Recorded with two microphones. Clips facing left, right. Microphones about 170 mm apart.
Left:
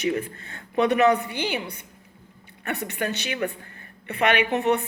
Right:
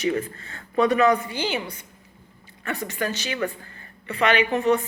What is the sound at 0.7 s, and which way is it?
Speech, 65° left (ahead or behind).